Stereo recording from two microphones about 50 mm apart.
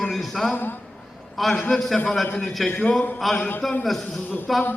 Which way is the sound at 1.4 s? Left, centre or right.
Centre.